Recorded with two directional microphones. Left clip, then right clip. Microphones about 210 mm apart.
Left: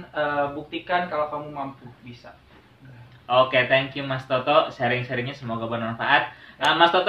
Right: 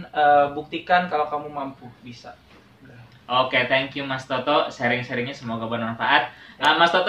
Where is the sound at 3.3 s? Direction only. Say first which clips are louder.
Left 1 dB; 5° left (ahead or behind).